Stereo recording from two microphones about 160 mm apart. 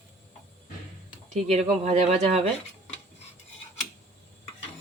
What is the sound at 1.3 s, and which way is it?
Speech, 45° right (ahead or behind).